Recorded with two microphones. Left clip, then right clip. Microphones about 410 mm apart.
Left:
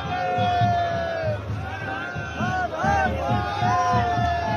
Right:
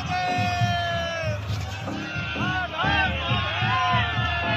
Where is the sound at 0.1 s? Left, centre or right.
Centre.